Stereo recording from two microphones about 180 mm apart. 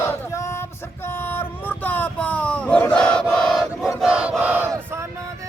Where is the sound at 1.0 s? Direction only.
10° left (ahead or behind).